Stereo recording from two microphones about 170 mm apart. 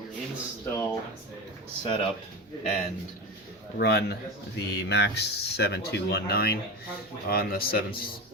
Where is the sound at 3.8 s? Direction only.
75° left (ahead or behind).